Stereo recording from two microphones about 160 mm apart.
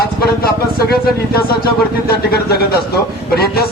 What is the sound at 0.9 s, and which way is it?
A man's voice, 70° left (ahead or behind).